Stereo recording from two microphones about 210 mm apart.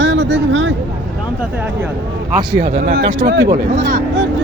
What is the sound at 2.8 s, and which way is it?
Speech, 50° right (ahead or behind).